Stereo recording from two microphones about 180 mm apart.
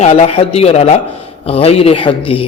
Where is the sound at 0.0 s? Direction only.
35° left (ahead or behind).